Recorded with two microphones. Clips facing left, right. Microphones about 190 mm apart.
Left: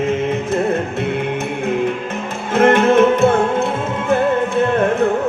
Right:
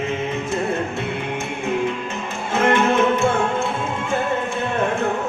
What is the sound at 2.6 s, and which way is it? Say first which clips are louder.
Music: left 6 dB; 55° left (ahead or behind).